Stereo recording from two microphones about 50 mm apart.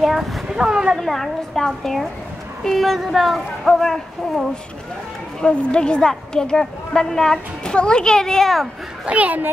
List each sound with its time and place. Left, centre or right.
0.0 s a sound: centre
0.6 s speech: centre
1.0 s speech: centre
5.4 s a woman's voice: left
9.0 s speech: right